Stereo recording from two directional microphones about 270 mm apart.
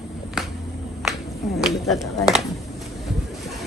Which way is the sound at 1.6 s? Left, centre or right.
Centre.